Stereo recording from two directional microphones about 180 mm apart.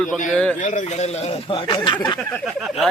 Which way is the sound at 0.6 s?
45° left (ahead or behind).